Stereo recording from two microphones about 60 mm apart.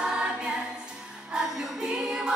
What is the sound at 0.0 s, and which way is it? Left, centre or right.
Choir, centre.